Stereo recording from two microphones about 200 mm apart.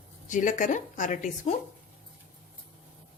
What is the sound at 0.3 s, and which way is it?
Speech, 40° left (ahead or behind).